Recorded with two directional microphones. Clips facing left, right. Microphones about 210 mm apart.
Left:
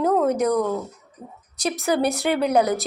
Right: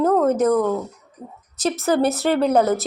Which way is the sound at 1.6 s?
15° left (ahead or behind).